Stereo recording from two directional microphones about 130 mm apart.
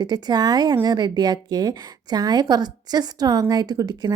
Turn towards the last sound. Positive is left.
turn(degrees=-30)  # may be behind; listen again after turning